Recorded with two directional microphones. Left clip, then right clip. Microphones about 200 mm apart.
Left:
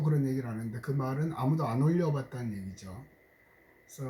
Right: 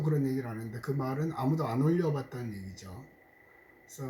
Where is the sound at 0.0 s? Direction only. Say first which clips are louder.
Right 1 dB; centre (ahead or behind).